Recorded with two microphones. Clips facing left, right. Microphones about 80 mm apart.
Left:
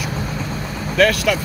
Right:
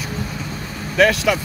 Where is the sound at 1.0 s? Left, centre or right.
Centre.